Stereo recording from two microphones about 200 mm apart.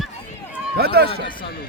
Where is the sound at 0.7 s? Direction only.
50° right (ahead or behind).